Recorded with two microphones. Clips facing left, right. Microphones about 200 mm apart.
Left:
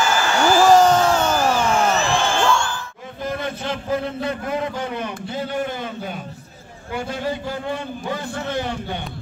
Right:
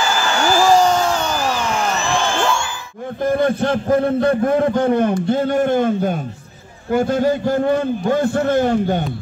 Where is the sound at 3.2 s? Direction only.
55° right (ahead or behind).